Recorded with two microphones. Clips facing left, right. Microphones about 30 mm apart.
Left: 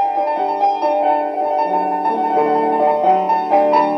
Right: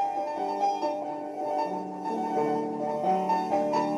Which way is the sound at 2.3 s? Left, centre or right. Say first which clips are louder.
Left 12 dB; left.